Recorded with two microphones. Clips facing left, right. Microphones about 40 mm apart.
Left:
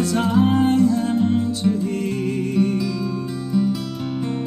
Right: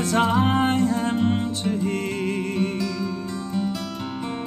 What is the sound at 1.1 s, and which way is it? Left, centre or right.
Music, right.